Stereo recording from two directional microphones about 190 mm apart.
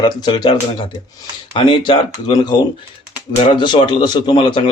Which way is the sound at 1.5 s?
25° left (ahead or behind).